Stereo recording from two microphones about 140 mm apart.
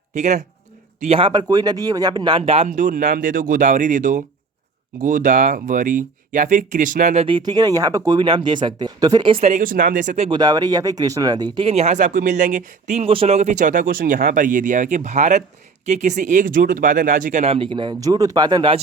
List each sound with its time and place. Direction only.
0.1 s a man's voice: 55° right (ahead or behind)
1.3 s speech: 30° right (ahead or behind)
2.4 s speech: 45° right (ahead or behind)
2.6 s speech: 65° right (ahead or behind)
7.3 s speech: 35° right (ahead or behind)
9.4 s speech: 55° right (ahead or behind)
9.6 s speech: 75° right (ahead or behind)
10.2 s speech: 30° right (ahead or behind)
11.6 s speech: 50° right (ahead or behind); by 18.8 s 35° right (ahead or behind)